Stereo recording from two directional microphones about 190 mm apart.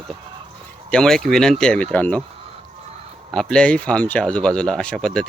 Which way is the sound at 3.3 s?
5° left (ahead or behind).